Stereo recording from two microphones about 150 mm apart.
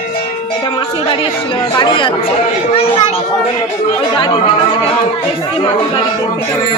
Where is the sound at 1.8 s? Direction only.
30° left (ahead or behind).